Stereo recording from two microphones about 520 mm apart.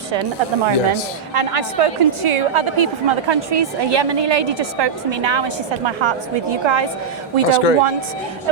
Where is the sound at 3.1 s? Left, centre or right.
Right.